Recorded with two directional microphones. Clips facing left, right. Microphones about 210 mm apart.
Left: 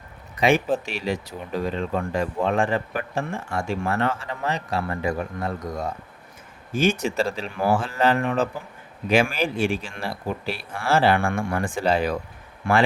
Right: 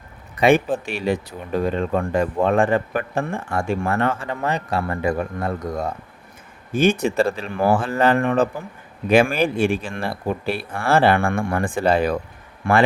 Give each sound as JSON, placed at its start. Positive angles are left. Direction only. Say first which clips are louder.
{"t": 0.3, "sound": "speech", "louder": "right 4 dB", "side_deg": -55}
{"t": 7.0, "sound": "speech", "louder": "right 5 dB", "side_deg": -55}